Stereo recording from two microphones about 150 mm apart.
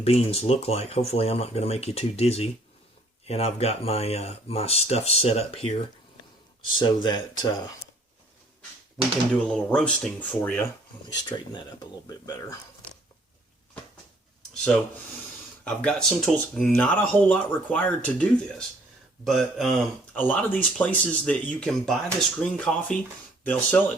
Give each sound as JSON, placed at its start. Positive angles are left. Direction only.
{"t": 0.0, "sound": "speech", "side_deg": 40}
{"t": 9.5, "sound": "speech", "side_deg": 5}
{"t": 11.1, "sound": "speech", "side_deg": 30}
{"t": 15.6, "sound": "speech", "side_deg": 5}
{"t": 20.1, "sound": "speech", "side_deg": 10}